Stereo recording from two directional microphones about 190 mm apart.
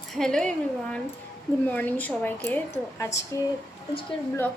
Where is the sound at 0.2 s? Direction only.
5° left (ahead or behind).